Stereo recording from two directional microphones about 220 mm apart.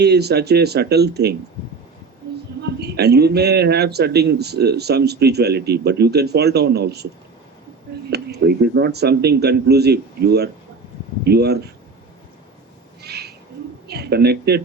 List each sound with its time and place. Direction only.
0.0 s speech: 50° right (ahead or behind)
2.6 s speech: 50° right (ahead or behind)
8.1 s speech: 50° right (ahead or behind)
13.0 s owl: 50° right (ahead or behind)
13.8 s a man's voice: 50° right (ahead or behind)